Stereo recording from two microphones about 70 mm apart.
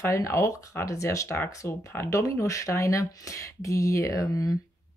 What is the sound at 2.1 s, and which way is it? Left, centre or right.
Speech, left.